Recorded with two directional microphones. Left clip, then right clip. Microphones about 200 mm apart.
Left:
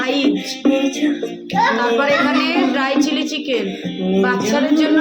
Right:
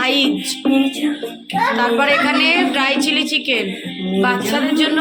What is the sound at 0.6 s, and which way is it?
Music, 50° left (ahead or behind).